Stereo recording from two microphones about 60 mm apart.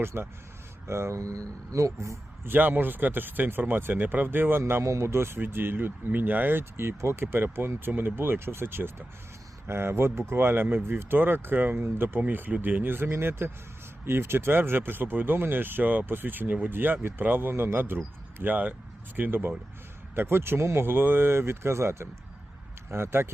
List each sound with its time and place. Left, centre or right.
0.0 s speech: right
1.2 s speech: right
2.4 s speech: right
4.6 s speech: right